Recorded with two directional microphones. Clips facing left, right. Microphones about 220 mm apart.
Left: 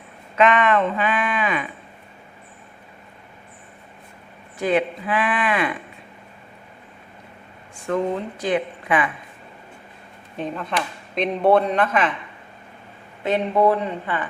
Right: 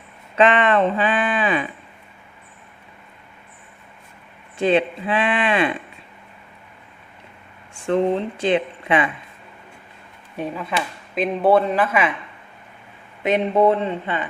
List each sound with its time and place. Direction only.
0.3 s speech: 30° right (ahead or behind)
4.5 s speech: 25° right (ahead or behind)
7.9 s speech: 30° right (ahead or behind)
10.3 s speech: 10° right (ahead or behind)
13.2 s speech: 20° right (ahead or behind)